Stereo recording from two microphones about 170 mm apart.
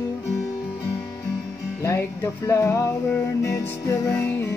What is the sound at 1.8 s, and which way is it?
Music, 15° left (ahead or behind).